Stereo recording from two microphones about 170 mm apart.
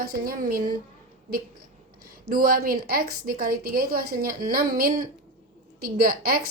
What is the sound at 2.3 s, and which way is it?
A woman's voice, 60° right (ahead or behind).